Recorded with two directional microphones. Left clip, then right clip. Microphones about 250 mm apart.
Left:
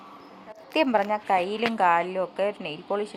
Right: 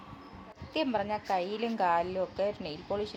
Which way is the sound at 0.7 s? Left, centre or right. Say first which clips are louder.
Left 8 dB; left.